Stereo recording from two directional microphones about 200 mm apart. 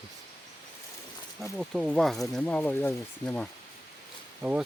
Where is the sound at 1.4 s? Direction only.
Centre (ahead or behind).